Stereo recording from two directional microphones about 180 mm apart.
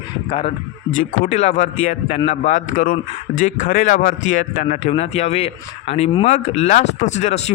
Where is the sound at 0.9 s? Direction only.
45° left (ahead or behind).